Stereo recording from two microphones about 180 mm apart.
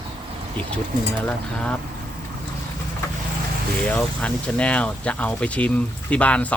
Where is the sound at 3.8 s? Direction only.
5° left (ahead or behind).